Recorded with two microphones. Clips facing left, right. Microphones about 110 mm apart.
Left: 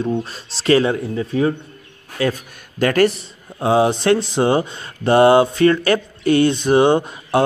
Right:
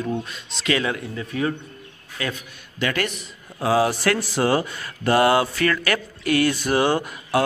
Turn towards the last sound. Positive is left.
turn(degrees=25)  # may be behind; listen again after turning